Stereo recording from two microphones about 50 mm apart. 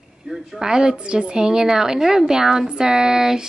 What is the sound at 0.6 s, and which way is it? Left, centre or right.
A woman's voice, centre.